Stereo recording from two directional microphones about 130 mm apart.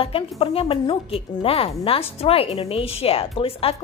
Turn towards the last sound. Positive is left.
turn(degrees=45)  # may be behind; listen again after turning